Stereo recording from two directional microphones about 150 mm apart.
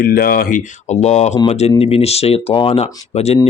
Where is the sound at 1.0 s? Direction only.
45° left (ahead or behind).